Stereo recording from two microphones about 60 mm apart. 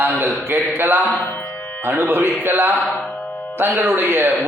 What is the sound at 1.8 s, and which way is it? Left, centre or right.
A man's voice, right.